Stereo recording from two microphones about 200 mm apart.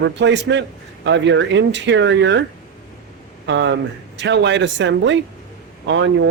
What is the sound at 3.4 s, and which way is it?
A man's voice, 65° right (ahead or behind).